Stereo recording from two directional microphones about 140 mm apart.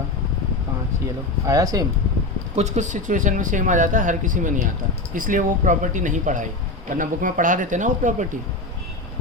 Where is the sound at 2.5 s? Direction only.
55° right (ahead or behind).